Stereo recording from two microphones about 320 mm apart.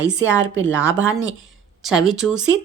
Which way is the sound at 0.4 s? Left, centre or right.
Right.